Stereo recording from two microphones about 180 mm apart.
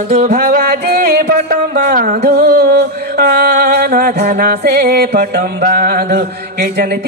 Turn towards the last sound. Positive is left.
turn(degrees=-60)  # may be behind; listen again after turning